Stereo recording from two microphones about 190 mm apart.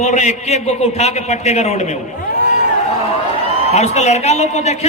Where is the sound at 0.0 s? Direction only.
40° left (ahead or behind).